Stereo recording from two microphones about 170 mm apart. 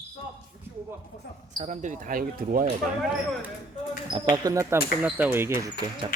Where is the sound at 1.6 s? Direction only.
45° right (ahead or behind).